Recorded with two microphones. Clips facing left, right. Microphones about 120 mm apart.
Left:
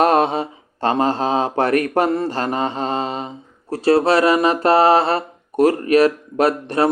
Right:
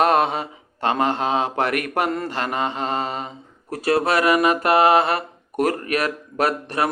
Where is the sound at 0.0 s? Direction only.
35° left (ahead or behind).